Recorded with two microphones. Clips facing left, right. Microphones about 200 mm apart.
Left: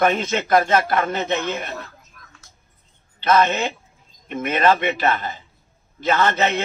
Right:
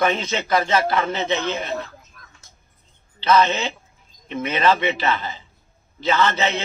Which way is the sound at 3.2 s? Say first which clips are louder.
Even; 50° left (ahead or behind).